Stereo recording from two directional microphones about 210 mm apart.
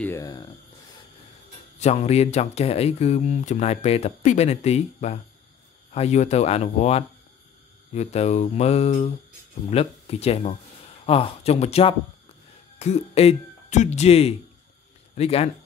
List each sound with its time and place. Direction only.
0.0 s speech: 15° left (ahead or behind)
1.8 s speech: 30° left (ahead or behind)